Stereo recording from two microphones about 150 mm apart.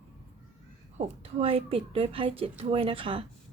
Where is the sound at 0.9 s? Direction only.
45° right (ahead or behind).